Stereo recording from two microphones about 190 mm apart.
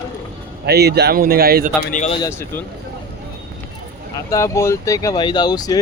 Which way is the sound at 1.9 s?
40° left (ahead or behind).